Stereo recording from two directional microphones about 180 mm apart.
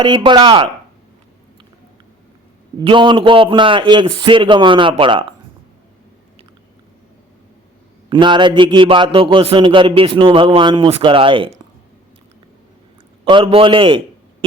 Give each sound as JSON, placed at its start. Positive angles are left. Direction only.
{"t": 0.0, "sound": "a man's voice", "side_deg": -25}
{"t": 2.7, "sound": "a man's voice", "side_deg": -25}
{"t": 8.1, "sound": "a man's voice", "side_deg": -25}
{"t": 13.2, "sound": "a man's voice", "side_deg": -30}